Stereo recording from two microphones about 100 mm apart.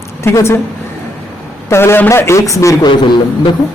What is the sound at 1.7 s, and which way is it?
A man's voice, 25° left (ahead or behind).